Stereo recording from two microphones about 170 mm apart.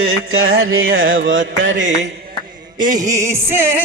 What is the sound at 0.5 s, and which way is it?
Music, 80° right.